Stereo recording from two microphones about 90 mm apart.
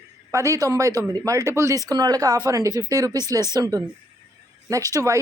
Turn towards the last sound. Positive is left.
turn(degrees=-40)  # may be behind; listen again after turning